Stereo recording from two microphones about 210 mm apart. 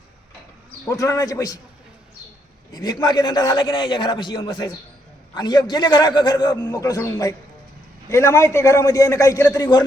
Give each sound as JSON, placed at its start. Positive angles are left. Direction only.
{"t": 0.9, "sound": "a man's voice", "side_deg": 15}
{"t": 2.7, "sound": "a man's voice", "side_deg": 20}